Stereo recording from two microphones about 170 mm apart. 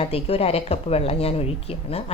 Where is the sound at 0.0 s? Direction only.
35° left (ahead or behind).